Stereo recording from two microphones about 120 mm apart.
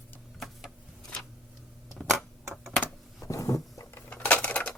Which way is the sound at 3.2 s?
25° left (ahead or behind).